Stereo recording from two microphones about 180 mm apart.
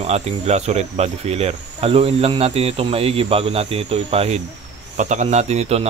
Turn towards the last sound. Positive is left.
turn(degrees=-35)  # may be behind; listen again after turning